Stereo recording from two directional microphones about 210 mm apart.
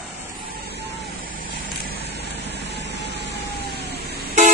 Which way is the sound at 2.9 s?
55° left (ahead or behind).